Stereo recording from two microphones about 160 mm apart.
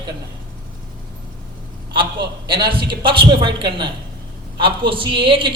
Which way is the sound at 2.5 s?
30° right (ahead or behind).